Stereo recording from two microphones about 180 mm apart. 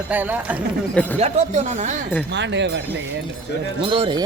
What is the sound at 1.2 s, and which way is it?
Speech, 40° right (ahead or behind).